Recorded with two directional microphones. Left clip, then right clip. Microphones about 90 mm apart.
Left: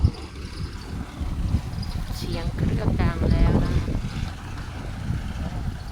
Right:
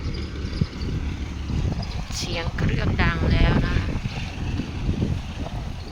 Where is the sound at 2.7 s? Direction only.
5° right (ahead or behind).